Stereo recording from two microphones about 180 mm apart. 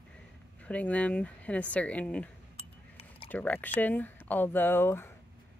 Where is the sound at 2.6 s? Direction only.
30° left (ahead or behind).